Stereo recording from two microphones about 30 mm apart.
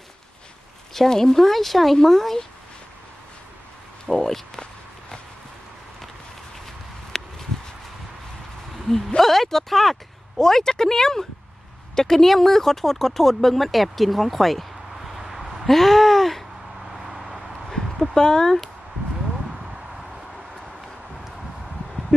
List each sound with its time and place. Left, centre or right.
0.9 s speech: centre
4.1 s speech: centre
7.1 s a sound: centre
8.9 s speech: centre
9.2 s speech: centre
10.3 s speech: centre
15.1 s a sound: centre
17.0 s vehicle: centre
18.1 s speech: left